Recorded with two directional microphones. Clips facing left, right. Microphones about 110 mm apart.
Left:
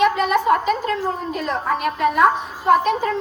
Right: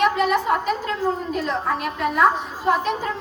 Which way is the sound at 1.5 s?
55° left (ahead or behind).